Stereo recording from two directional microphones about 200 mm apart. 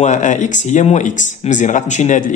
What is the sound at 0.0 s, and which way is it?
Speech, 40° left (ahead or behind).